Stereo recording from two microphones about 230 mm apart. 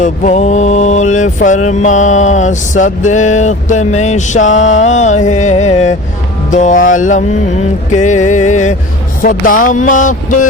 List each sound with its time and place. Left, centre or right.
0.0 s mantra: left